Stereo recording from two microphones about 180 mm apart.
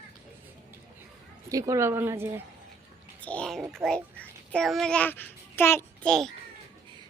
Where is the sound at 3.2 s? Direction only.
5° left (ahead or behind).